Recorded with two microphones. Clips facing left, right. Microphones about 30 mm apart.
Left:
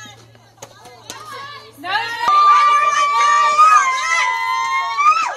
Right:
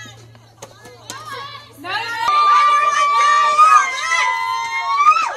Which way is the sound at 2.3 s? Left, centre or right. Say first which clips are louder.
Left 1 dB; centre.